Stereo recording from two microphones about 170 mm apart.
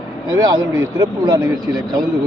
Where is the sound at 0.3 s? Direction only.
20° right (ahead or behind).